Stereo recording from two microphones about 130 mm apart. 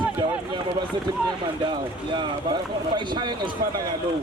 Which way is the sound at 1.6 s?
35° right (ahead or behind).